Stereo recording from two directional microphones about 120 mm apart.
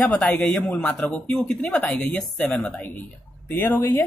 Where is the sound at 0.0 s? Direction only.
15° left (ahead or behind).